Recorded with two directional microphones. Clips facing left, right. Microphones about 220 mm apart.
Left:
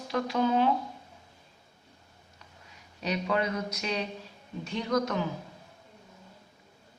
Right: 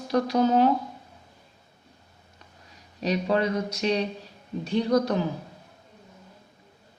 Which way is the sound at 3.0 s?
35° right (ahead or behind).